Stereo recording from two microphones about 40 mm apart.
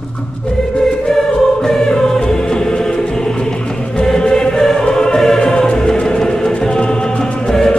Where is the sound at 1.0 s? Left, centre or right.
Centre.